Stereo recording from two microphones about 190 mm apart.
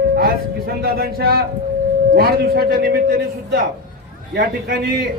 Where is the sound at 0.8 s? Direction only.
55° right (ahead or behind).